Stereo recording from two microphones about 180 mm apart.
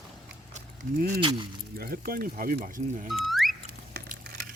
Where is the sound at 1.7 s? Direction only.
60° right (ahead or behind).